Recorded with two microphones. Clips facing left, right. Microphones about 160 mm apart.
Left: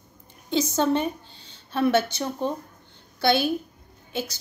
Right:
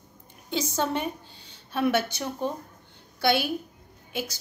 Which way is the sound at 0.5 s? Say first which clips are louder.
Left 5 dB; 5° right (ahead or behind).